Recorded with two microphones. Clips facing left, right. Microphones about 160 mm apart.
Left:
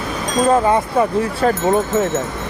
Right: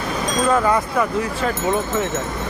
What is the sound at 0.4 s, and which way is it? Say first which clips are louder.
Speech: left 4 dB; 25° left (ahead or behind).